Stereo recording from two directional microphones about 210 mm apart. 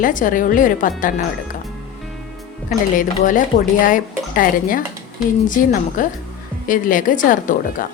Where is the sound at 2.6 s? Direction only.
40° left (ahead or behind).